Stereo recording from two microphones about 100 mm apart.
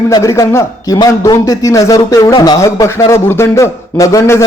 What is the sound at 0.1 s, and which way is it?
A man's voice, 30° left (ahead or behind).